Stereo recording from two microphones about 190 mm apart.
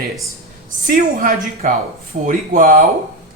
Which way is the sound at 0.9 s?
45° right (ahead or behind).